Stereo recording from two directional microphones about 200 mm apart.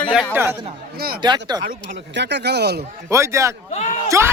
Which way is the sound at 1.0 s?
50° right (ahead or behind).